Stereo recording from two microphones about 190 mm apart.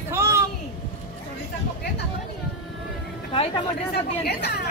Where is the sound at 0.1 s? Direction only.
15° right (ahead or behind).